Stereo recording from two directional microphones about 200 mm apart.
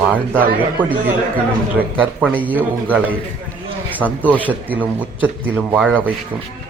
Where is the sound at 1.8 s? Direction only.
10° right (ahead or behind).